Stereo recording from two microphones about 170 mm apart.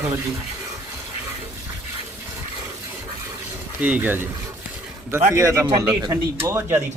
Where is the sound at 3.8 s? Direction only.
10° right (ahead or behind).